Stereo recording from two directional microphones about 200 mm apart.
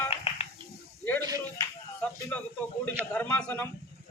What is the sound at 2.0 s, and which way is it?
Speech, 5° left (ahead or behind).